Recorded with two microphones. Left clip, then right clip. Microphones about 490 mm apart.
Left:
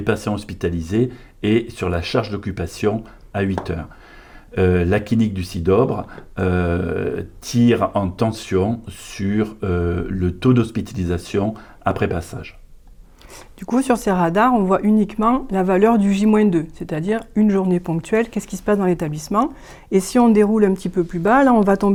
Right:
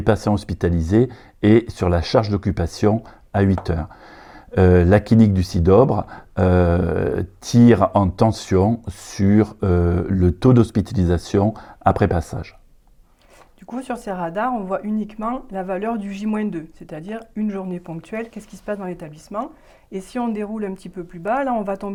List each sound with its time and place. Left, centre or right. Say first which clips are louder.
0.0 s speech: right 2 dB; right
13.6 s speech: left 10 dB; left